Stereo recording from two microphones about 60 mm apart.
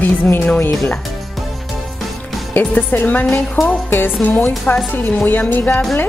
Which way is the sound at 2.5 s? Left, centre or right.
Left.